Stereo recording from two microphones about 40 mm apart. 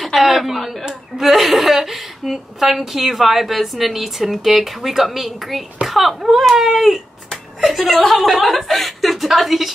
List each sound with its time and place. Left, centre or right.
0.0 s a woman's voice: centre